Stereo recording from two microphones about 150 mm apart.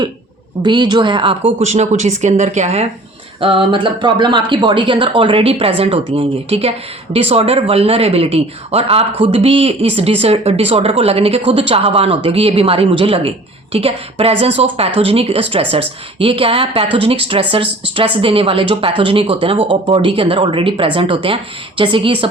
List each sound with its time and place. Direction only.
0.6 s a woman's voice: 30° right (ahead or behind); by 2.8 s 45° right (ahead or behind)
3.4 s speech: 35° right (ahead or behind)